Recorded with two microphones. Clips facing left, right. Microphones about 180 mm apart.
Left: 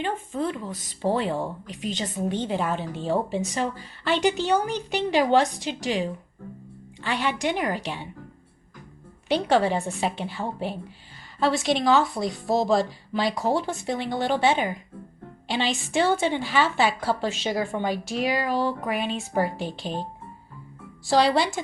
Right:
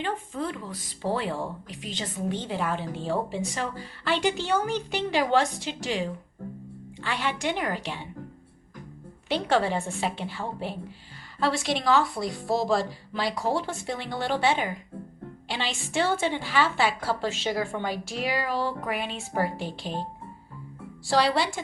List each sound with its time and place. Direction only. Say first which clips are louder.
0.0 s a woman's voice: left 3 dB; 20° left (ahead or behind)
9.3 s a woman's voice: left 3 dB; 15° left (ahead or behind)
21.1 s speech: left 3 dB; 20° left (ahead or behind)